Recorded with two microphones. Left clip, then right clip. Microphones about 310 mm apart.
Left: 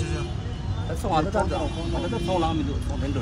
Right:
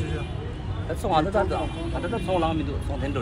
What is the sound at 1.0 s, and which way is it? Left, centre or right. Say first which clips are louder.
Speech: right 1 dB; centre.